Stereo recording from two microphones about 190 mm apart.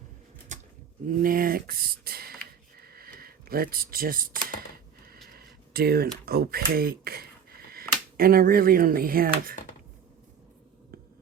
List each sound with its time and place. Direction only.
1.0 s speech: 45° right (ahead or behind)
2.7 s a sound: 55° right (ahead or behind)
5.3 s speech: 55° right (ahead or behind)